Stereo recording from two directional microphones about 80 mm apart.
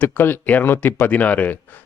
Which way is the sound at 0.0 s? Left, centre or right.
Left.